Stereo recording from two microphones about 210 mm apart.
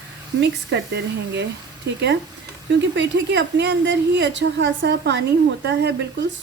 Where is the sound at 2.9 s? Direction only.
55° right (ahead or behind).